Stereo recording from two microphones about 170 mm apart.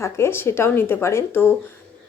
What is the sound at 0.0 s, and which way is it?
A woman's voice, 15° left (ahead or behind).